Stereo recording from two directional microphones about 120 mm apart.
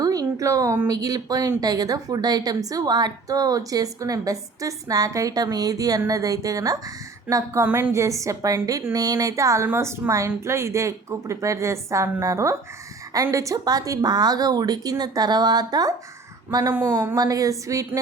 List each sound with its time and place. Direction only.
0.0 s a woman's voice: 30° right (ahead or behind)
16.7 s a woman's voice: 20° right (ahead or behind)
17.2 s speech: 30° right (ahead or behind)